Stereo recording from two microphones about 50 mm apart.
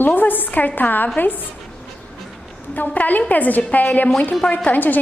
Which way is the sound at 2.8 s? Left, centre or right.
Left.